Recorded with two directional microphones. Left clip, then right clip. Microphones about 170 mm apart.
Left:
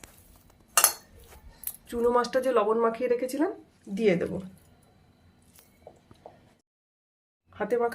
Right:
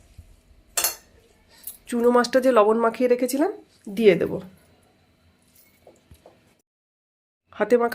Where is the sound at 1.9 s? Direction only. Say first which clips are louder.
Right 6 dB; 30° right (ahead or behind); by 4.3 s 55° right (ahead or behind).